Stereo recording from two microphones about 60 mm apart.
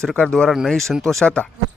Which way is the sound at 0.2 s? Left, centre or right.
Centre.